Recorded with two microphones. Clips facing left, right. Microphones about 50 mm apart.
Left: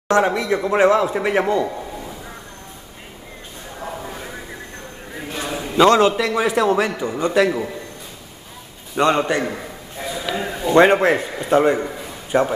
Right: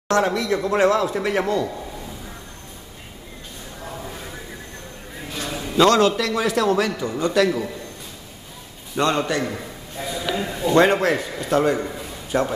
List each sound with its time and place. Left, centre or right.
0.1 s a man's voice: centre
3.8 s a sound: centre
5.1 s a man's voice: centre
8.9 s a man's voice: centre
11.8 s a sound: centre
12.3 s a man's voice: left